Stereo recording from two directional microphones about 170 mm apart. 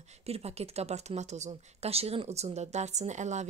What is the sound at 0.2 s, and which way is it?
A woman's voice, 35° right (ahead or behind).